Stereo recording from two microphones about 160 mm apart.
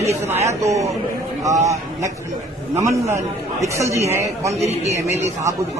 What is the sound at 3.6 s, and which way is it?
Speech, 20° right (ahead or behind).